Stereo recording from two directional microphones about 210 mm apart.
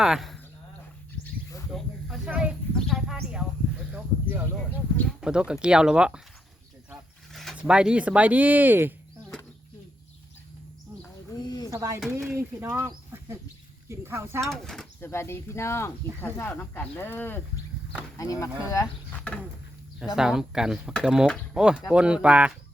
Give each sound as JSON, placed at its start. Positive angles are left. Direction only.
{"t": 0.0, "sound": "speech", "side_deg": 0}
{"t": 1.2, "sound": "a sound", "side_deg": 15}
{"t": 1.7, "sound": "a sound", "side_deg": 0}
{"t": 4.7, "sound": "speech", "side_deg": 10}
{"t": 5.2, "sound": "speech", "side_deg": -5}
{"t": 7.3, "sound": "speech", "side_deg": 0}
{"t": 11.3, "sound": "a sound", "side_deg": 20}
{"t": 11.7, "sound": "speech", "side_deg": -15}
{"t": 14.4, "sound": "speech", "side_deg": 0}